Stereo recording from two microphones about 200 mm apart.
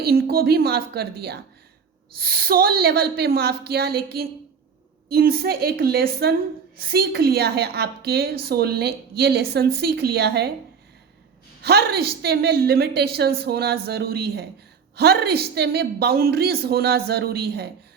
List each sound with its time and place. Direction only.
0.0 s a woman's voice: 50° right (ahead or behind)
11.6 s a woman's voice: 55° right (ahead or behind)